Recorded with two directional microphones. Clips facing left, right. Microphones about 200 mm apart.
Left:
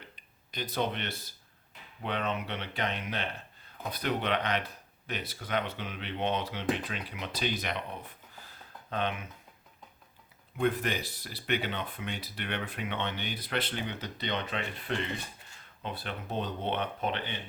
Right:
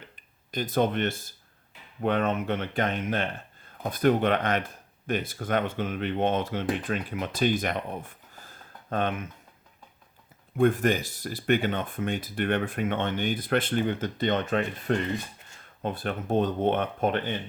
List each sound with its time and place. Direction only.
0.2 s speech: 50° right (ahead or behind)
10.6 s speech: 45° right (ahead or behind)